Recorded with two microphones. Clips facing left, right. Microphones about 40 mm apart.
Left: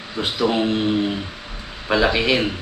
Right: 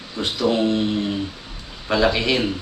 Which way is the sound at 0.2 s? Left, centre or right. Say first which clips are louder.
Even; centre.